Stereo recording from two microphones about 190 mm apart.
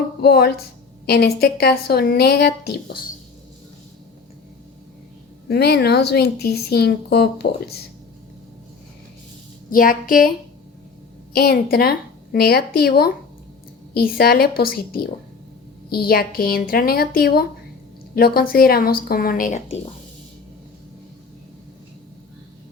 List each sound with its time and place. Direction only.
0.2 s speech: 55° left (ahead or behind)
5.5 s speech: 60° left (ahead or behind)
9.6 s speech: 45° left (ahead or behind)
11.3 s speech: 55° left (ahead or behind)